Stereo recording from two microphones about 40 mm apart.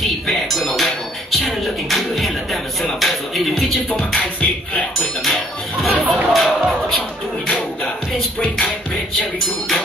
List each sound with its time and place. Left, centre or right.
0.0 s music: centre
1.3 s speech: centre
5.2 s music: centre
6.0 s speech: right
6.3 s music: centre